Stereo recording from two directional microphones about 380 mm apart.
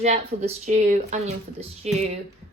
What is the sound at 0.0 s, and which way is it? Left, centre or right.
Speech, centre.